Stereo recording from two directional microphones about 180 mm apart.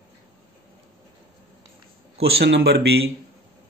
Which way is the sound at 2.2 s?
65° right (ahead or behind).